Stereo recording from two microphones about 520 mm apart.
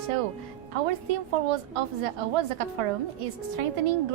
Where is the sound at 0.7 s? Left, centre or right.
Right.